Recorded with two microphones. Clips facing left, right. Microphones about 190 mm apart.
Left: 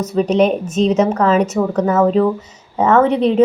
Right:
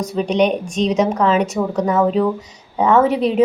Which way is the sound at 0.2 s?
5° left (ahead or behind).